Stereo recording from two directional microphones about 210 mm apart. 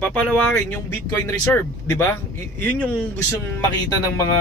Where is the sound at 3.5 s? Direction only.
15° left (ahead or behind).